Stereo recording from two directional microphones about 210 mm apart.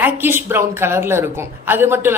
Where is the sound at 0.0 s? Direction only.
10° right (ahead or behind).